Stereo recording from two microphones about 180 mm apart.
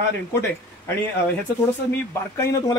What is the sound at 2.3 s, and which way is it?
Speech, 15° left (ahead or behind).